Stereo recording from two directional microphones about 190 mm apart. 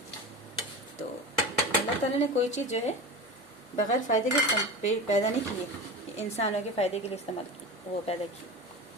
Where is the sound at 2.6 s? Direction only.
35° left (ahead or behind).